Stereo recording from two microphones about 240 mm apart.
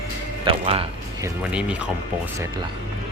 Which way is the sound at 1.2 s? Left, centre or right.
Centre.